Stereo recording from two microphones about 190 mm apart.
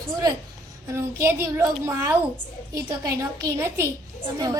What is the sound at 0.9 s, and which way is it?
A woman's voice, 15° right (ahead or behind).